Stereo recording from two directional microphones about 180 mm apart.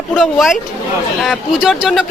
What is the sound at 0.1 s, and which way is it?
Speech, centre (ahead or behind).